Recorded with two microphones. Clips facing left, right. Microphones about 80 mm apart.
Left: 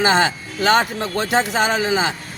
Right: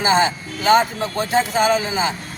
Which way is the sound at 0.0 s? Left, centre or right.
Left.